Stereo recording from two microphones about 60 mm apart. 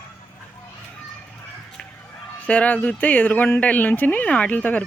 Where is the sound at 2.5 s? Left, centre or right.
Left.